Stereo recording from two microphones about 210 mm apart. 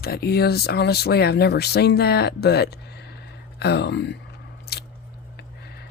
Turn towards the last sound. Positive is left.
turn(degrees=50)  # may be behind; listen again after turning